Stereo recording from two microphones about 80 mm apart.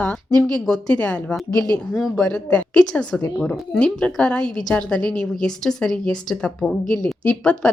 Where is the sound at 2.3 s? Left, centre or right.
Centre.